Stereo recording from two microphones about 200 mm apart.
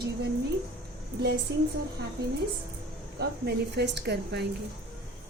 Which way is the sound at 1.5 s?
55° right (ahead or behind).